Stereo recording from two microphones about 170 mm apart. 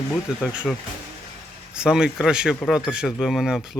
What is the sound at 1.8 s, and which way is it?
Speech, 5° right (ahead or behind).